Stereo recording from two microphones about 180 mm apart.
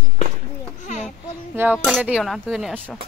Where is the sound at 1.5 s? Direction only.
10° right (ahead or behind).